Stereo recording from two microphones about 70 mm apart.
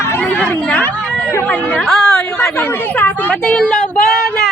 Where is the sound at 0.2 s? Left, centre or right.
Centre.